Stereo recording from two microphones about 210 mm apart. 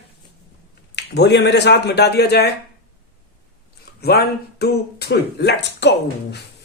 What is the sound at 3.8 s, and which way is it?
Speech, 50° left (ahead or behind).